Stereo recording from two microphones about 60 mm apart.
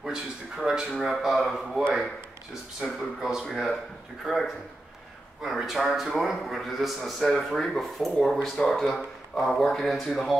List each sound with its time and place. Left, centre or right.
0.0 s a man's voice: centre